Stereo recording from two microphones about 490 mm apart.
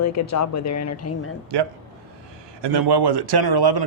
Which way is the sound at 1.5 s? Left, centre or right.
Right.